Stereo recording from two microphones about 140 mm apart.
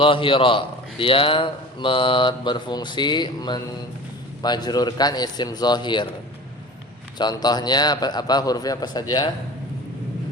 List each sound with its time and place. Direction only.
0.0 s a man's voice: 40° left (ahead or behind)
7.2 s a man's voice: 30° left (ahead or behind)